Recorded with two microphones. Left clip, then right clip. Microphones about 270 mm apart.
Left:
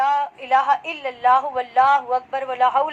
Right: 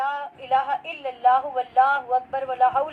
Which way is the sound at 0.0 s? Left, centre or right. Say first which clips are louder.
Left 7 dB; left.